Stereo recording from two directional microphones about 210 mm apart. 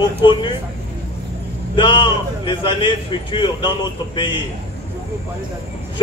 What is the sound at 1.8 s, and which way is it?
A man's voice, 25° left (ahead or behind).